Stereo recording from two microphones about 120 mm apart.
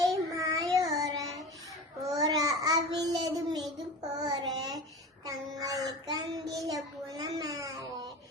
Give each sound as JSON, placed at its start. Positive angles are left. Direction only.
{"t": 0.1, "sound": "child singing", "side_deg": -30}